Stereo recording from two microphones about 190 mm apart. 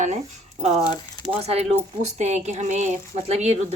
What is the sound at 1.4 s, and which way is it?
A woman's voice, 35° right (ahead or behind).